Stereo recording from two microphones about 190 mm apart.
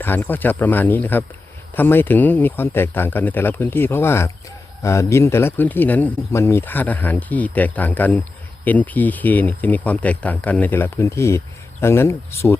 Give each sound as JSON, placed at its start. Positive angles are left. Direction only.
{"t": 0.0, "sound": "speech", "side_deg": 10}